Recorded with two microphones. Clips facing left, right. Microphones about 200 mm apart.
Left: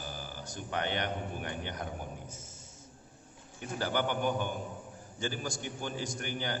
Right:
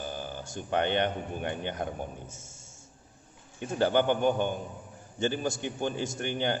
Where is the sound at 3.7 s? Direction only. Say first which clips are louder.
Right 7 dB; 25° right (ahead or behind).